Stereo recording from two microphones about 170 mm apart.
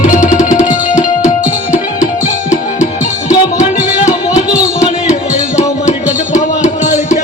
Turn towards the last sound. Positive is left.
turn(degrees=45)  # may be behind; listen again after turning